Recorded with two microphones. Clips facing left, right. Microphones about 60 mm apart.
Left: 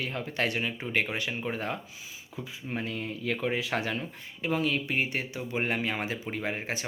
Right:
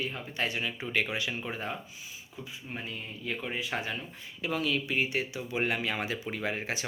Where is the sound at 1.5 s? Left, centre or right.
Left.